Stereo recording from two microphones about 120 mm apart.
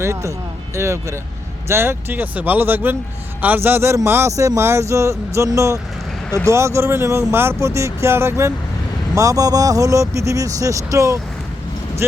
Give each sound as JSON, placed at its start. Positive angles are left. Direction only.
{"t": 0.0, "sound": "speech", "side_deg": -25}